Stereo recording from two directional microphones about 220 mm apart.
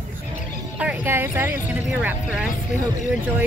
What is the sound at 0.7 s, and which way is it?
Speech, 5° right (ahead or behind).